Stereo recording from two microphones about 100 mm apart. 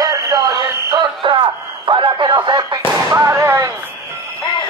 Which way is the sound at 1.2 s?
55° right (ahead or behind).